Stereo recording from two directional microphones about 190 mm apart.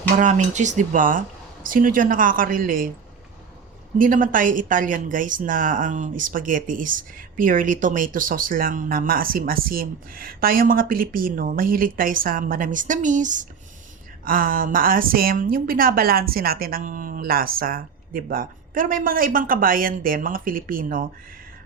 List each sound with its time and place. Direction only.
0.2 s speech: 40° right (ahead or behind)
3.9 s speech: 45° right (ahead or behind)